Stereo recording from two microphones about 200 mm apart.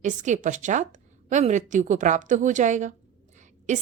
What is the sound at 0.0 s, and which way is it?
A woman's voice, 35° right (ahead or behind).